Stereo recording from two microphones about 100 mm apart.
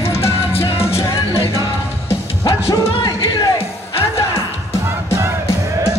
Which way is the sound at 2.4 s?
40° left (ahead or behind).